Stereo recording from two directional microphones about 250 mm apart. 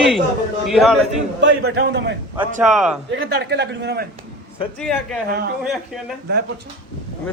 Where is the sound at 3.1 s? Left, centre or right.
Right.